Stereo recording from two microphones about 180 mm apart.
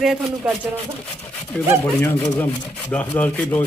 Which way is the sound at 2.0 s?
15° left (ahead or behind).